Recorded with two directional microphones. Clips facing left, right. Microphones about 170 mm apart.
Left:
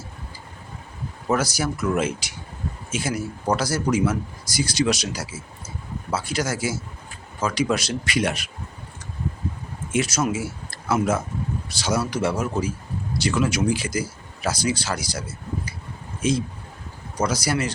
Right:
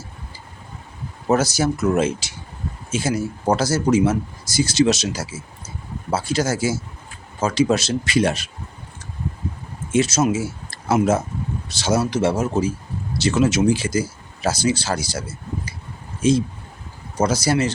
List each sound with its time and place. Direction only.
1.3 s speech: 25° right (ahead or behind)
9.9 s speech: 25° right (ahead or behind)
16.2 s speech: 30° right (ahead or behind)